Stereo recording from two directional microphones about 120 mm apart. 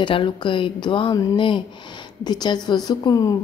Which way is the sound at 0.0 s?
40° left (ahead or behind).